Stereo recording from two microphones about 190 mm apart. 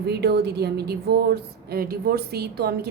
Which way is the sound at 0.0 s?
60° right (ahead or behind).